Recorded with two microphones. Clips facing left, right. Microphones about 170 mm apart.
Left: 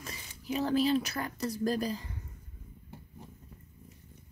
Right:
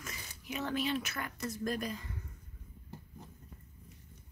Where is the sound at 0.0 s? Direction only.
30° left (ahead or behind).